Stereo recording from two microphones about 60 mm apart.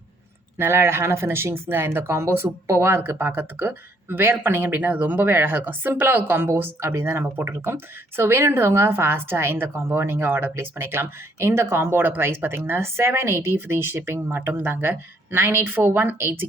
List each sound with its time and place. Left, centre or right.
0.6 s speech: right